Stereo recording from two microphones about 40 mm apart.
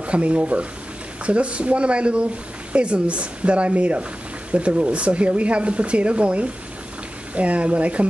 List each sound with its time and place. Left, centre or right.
0.0 s speech: right